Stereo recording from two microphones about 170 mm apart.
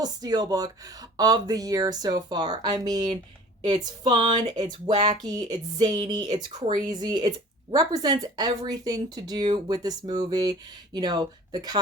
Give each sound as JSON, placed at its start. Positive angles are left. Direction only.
{"t": 0.0, "sound": "speech", "side_deg": -25}